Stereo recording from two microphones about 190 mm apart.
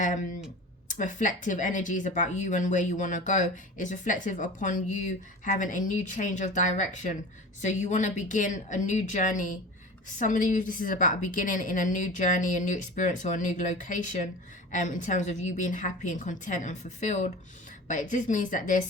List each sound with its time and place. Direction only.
0.9 s a woman's voice: 40° left (ahead or behind)